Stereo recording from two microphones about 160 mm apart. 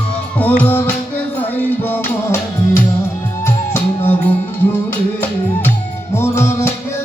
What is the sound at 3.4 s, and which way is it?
Music, 15° left (ahead or behind).